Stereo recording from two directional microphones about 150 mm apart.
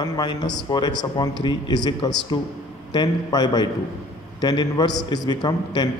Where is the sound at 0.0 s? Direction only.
30° left (ahead or behind).